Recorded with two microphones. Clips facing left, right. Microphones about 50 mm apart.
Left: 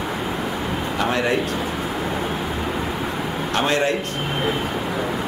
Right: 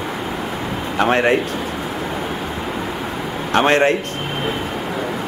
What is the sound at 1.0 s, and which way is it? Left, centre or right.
Speech, right.